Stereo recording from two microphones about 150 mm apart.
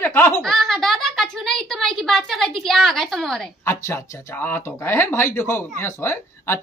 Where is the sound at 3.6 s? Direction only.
20° left (ahead or behind).